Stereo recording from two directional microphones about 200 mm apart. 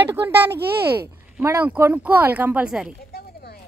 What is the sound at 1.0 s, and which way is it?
Speech, 15° right (ahead or behind).